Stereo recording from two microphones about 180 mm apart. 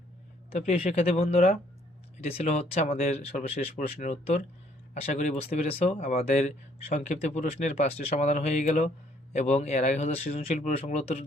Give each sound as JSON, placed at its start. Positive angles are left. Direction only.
{"t": 0.6, "sound": "speech", "side_deg": 40}